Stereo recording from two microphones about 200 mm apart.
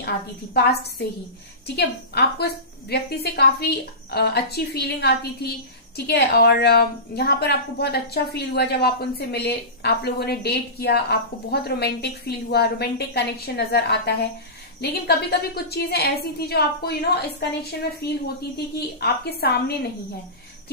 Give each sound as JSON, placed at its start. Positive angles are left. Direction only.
{"t": 0.6, "sound": "a woman's voice", "side_deg": 55}
{"t": 18.8, "sound": "a woman's voice", "side_deg": 55}